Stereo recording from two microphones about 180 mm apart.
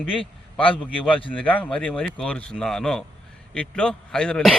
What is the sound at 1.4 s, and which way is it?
Speech, 5° left (ahead or behind).